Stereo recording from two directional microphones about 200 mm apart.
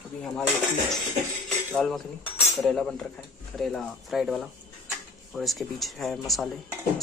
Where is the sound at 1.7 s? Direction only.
5° left (ahead or behind).